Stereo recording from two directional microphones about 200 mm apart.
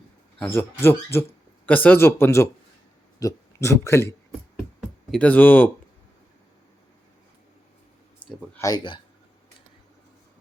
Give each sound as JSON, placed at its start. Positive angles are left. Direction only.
{"t": 0.3, "sound": "speech", "side_deg": 10}
{"t": 5.1, "sound": "speech", "side_deg": 5}
{"t": 8.2, "sound": "a sound", "side_deg": 25}
{"t": 8.5, "sound": "speech", "side_deg": 20}